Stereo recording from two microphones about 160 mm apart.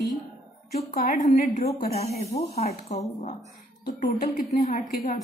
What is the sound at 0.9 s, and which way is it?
Speech, 60° left (ahead or behind).